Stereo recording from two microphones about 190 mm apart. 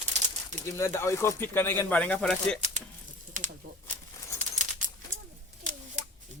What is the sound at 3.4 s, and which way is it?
Bird, 45° right (ahead or behind).